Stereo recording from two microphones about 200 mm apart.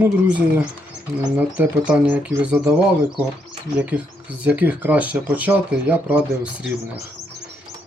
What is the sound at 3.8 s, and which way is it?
Speech, 5° right (ahead or behind).